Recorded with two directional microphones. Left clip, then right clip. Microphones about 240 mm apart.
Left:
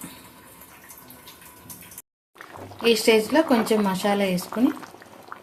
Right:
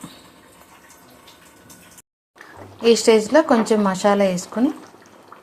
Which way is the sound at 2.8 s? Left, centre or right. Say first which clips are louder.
Right 4 dB; centre.